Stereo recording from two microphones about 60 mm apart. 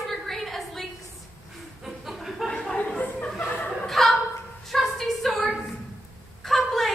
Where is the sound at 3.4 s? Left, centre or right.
Left.